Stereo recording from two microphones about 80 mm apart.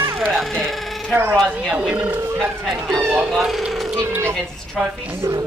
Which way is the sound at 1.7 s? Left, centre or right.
Centre.